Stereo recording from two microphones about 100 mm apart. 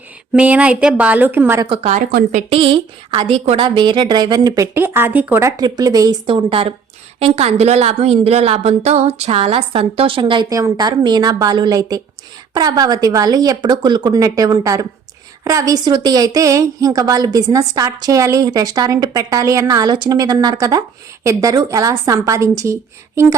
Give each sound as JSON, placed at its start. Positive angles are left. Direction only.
{"t": 0.3, "sound": "speech", "side_deg": -15}
{"t": 2.5, "sound": "a woman's voice", "side_deg": -60}
{"t": 3.2, "sound": "a woman's voice", "side_deg": -80}
{"t": 3.8, "sound": "a woman's voice", "side_deg": -50}
{"t": 5.5, "sound": "a woman's voice", "side_deg": -40}
{"t": 6.2, "sound": "a woman's voice", "side_deg": -65}
{"t": 7.2, "sound": "a woman's voice", "side_deg": -85}
{"t": 10.5, "sound": "a woman's voice", "side_deg": -40}
{"t": 14.2, "sound": "a woman's voice", "side_deg": -35}